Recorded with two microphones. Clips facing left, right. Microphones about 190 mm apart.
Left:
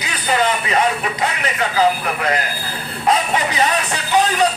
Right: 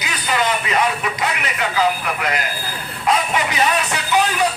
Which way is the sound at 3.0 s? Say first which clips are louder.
Left 1 dB; 30° left (ahead or behind).